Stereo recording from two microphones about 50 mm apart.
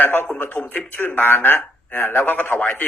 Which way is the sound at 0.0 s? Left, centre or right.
Left.